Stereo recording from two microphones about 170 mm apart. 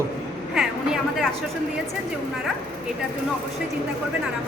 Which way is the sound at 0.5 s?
5° right (ahead or behind).